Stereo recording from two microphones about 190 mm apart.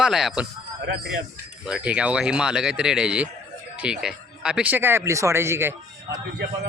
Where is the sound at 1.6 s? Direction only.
5° right (ahead or behind).